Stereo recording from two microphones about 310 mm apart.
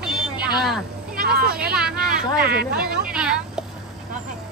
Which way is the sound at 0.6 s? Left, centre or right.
Centre.